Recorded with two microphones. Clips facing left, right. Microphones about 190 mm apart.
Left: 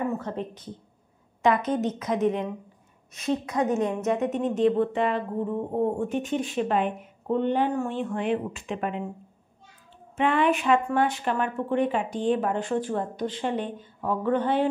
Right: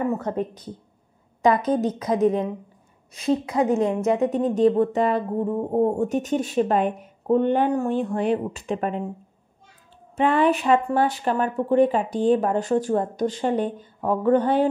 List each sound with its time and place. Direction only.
0.2 s a woman's voice: 45° right (ahead or behind)
10.1 s a woman's voice: 40° right (ahead or behind)